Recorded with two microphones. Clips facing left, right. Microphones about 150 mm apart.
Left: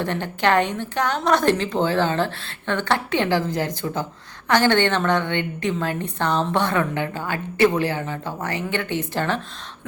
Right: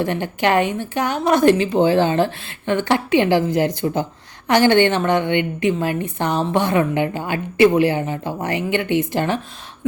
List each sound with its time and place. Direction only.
0.0 s a woman's voice: 10° right (ahead or behind)